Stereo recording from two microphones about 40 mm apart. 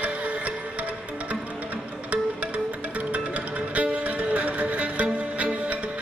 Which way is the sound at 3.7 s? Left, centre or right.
Right.